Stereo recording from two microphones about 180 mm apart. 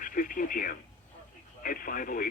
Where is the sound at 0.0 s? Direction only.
50° left (ahead or behind).